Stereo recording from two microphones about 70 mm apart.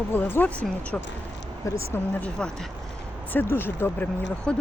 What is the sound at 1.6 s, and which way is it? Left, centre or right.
Speech, left.